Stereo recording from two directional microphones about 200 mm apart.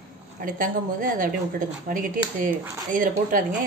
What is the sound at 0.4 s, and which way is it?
A woman's voice, 40° right (ahead or behind).